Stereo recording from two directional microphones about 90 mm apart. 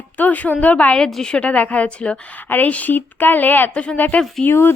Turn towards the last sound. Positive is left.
turn(degrees=25)  # may be behind; listen again after turning